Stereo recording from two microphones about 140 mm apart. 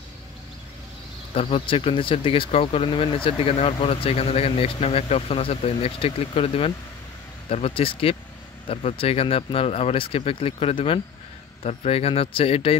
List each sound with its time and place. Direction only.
1.3 s speech: 40° left (ahead or behind)